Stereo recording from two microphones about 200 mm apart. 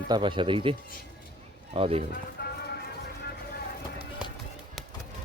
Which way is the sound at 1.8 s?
30° right (ahead or behind).